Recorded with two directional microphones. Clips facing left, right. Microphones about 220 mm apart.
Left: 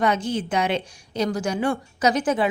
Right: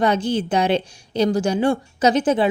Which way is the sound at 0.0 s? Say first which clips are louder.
Right 3 dB; 30° right (ahead or behind).